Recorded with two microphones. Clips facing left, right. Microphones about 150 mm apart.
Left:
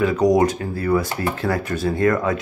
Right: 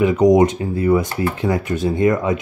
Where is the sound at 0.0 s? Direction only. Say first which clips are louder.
Right 4 dB; 20° right (ahead or behind).